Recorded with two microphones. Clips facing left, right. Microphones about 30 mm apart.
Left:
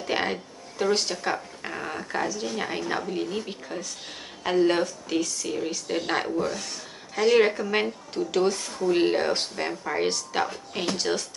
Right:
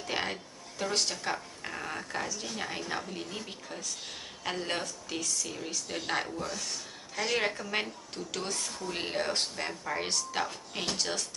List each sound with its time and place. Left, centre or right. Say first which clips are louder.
0.0 s speech: left 7 dB; centre
2.3 s speech: left 7 dB; centre